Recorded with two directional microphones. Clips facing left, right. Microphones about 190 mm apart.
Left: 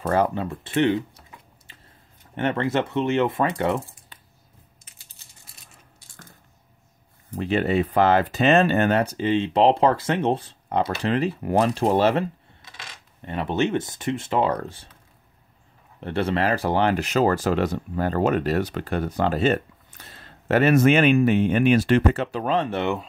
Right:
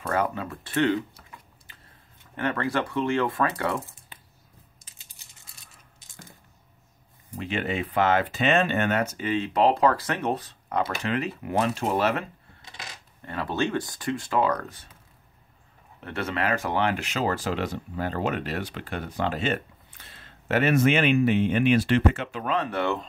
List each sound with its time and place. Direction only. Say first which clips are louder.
0.0 s speech: left 5 dB; 30° left (ahead or behind)
5.2 s a sound: left 1 dB; 15° right (ahead or behind)
7.3 s speech: left 7 dB; 40° left (ahead or behind)
16.0 s speech: left 6 dB; 30° left (ahead or behind)